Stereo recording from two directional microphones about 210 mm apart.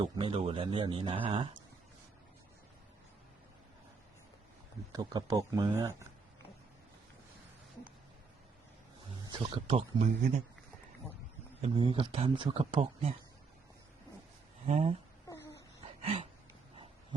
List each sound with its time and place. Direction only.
0.0 s speech: 25° right (ahead or behind)
4.9 s speech: 15° right (ahead or behind)
9.3 s speech: 25° right (ahead or behind)
11.6 s speech: 25° right (ahead or behind)
14.7 s speech: 30° right (ahead or behind)
15.3 s a sound: 15° left (ahead or behind)